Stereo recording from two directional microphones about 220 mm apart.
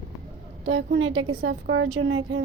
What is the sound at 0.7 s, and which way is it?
A woman's voice, 65° right (ahead or behind).